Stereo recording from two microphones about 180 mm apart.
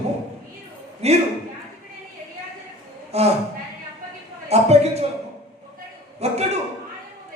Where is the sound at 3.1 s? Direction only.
35° right (ahead or behind).